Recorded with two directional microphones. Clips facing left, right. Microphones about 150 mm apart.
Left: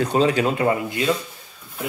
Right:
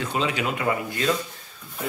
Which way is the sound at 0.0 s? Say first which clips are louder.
Left 7 dB; 40° left (ahead or behind).